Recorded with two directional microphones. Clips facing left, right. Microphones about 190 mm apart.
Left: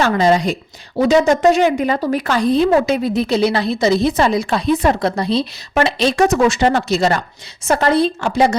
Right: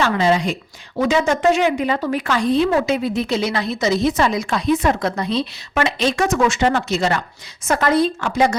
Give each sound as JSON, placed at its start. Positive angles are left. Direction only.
{"t": 0.0, "sound": "a woman's voice", "side_deg": 40}